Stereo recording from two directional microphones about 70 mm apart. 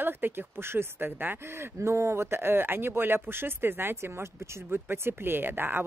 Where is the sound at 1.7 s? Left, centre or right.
Right.